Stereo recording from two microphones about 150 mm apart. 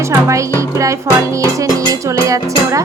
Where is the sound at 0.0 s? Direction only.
20° right (ahead or behind).